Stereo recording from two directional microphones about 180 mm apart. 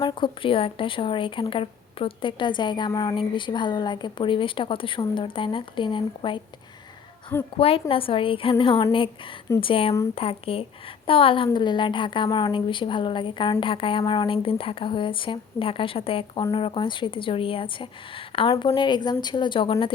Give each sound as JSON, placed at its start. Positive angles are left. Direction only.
{"t": 0.0, "sound": "a woman's voice", "side_deg": 30}
{"t": 7.5, "sound": "a woman's voice", "side_deg": 30}